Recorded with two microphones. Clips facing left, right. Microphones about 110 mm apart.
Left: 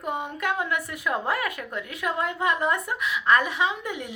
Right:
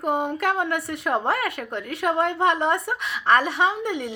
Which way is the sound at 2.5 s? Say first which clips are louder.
Right 3 dB; 30° right (ahead or behind).